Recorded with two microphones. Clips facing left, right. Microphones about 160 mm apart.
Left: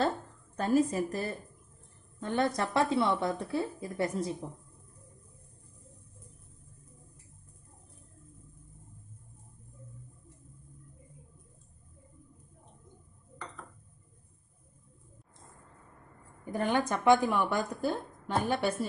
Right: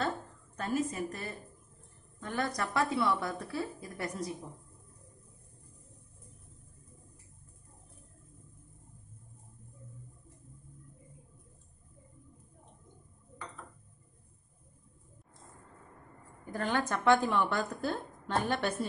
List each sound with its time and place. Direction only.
0.6 s a woman's voice: 35° left (ahead or behind)
16.5 s a woman's voice: 15° left (ahead or behind)